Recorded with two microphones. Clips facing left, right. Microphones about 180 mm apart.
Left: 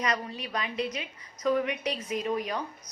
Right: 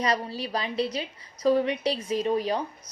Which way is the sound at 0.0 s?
30° right (ahead or behind).